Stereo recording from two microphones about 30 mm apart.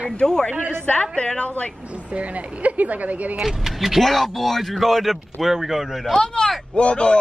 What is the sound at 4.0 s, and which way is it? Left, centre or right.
A man's voice, centre.